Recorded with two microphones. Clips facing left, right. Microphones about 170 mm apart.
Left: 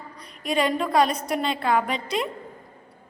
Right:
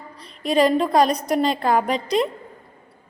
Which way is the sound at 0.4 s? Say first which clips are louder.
Right 6 dB; 35° right (ahead or behind).